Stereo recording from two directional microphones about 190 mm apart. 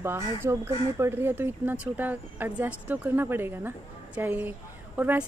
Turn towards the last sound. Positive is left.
turn(degrees=-10)  # may be behind; listen again after turning